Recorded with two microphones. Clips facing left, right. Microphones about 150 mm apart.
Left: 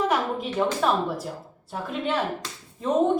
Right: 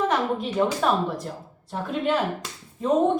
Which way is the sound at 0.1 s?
Centre (ahead or behind).